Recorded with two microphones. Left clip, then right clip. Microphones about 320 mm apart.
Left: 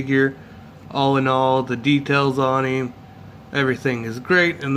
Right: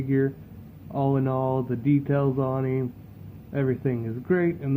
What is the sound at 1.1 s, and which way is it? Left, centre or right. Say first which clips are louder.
Speech: left 8 dB; centre.